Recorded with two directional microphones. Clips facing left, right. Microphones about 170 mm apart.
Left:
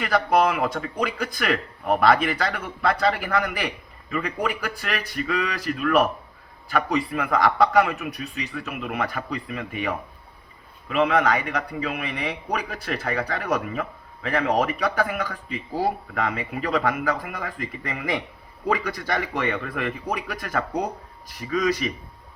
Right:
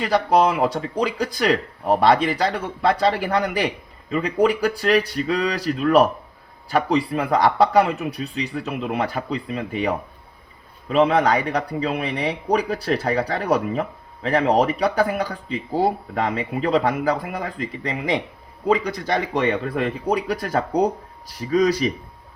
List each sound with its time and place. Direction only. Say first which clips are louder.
0.0 s a man's voice: right 3 dB; 30° right (ahead or behind)